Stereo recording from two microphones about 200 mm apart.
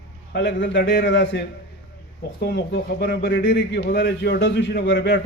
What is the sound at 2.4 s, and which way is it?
Speech, 55° left (ahead or behind).